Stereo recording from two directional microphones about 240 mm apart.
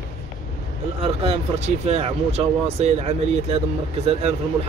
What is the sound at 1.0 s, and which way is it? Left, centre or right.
Speech, right.